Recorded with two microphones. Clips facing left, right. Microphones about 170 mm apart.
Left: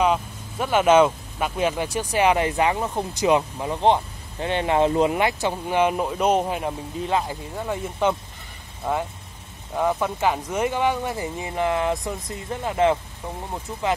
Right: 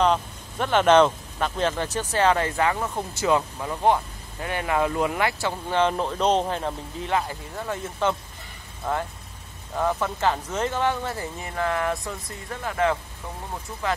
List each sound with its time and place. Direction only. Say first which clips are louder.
0.0 s speech: even; 5° left (ahead or behind)